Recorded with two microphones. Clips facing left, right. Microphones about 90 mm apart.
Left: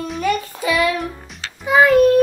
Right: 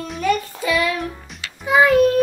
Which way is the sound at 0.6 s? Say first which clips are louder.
Left 2 dB; 15° left (ahead or behind).